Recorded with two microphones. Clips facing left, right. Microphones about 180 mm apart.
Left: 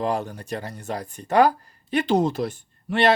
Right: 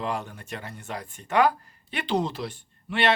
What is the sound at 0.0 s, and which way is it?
Speech, 40° left (ahead or behind).